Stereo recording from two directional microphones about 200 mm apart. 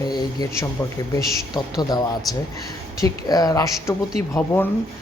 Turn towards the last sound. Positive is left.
turn(degrees=10)  # may be behind; listen again after turning